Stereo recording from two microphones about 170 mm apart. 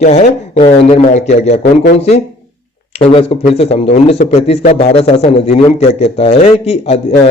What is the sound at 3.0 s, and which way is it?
A man's voice, 35° left (ahead or behind).